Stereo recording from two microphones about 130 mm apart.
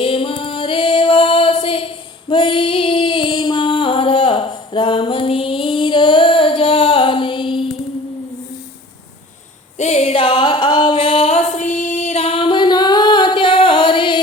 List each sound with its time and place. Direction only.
0.0 s music: 45° left (ahead or behind)
2.3 s female singing: 40° left (ahead or behind)
9.7 s a sound: 60° left (ahead or behind); by 14.2 s 40° left (ahead or behind)